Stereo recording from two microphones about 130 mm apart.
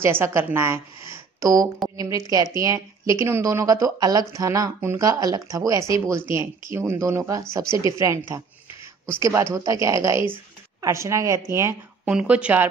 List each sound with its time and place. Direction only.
0.0 s a woman's voice: 20° right (ahead or behind)
9.2 s a woman's voice: 20° right (ahead or behind)
12.1 s a woman's voice: 10° right (ahead or behind)